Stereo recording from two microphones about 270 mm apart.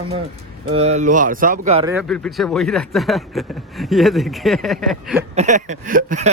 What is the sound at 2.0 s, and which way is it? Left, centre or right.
Speech, centre.